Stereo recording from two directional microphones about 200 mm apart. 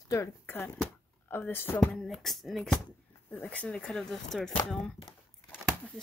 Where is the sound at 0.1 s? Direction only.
10° left (ahead or behind).